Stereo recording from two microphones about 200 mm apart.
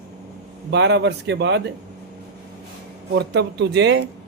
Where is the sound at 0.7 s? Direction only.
60° right (ahead or behind).